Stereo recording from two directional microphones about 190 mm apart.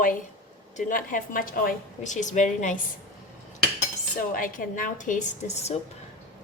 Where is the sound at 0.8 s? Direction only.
45° left (ahead or behind).